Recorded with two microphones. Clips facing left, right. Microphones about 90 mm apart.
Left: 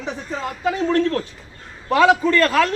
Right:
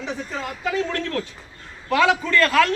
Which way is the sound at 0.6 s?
30° left (ahead or behind).